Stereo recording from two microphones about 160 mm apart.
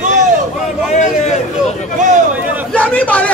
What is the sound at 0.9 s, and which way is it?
Speech, 45° left (ahead or behind).